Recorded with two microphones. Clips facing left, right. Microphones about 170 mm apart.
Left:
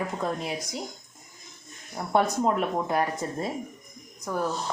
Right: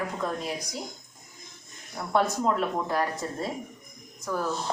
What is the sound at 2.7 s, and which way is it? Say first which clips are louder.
Speech: left 2 dB; 20° left (ahead or behind).